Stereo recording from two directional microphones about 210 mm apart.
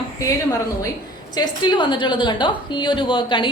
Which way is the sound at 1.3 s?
20° left (ahead or behind).